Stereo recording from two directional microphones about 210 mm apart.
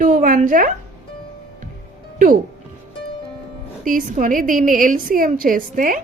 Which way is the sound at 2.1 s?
40° right (ahead or behind).